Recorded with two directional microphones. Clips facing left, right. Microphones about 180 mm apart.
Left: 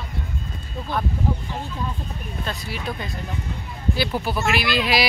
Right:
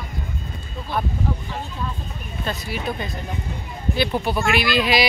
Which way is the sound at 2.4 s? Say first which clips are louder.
Right 4 dB; centre (ahead or behind).